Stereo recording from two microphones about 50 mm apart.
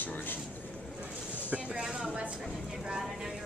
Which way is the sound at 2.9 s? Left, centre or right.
Centre.